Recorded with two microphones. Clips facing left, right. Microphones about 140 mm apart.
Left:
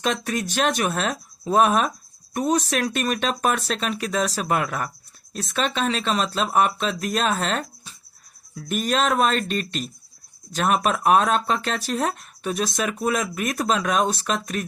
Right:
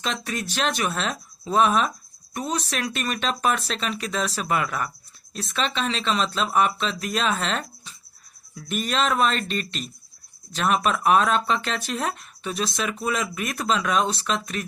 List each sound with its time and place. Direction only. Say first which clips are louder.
0.0 s speech: left 4 dB; 50° left (ahead or behind)